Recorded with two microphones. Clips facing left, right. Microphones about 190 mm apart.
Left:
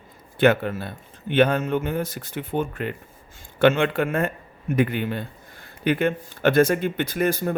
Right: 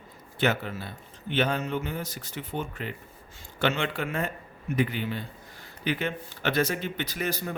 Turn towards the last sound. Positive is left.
turn(degrees=50)  # may be behind; listen again after turning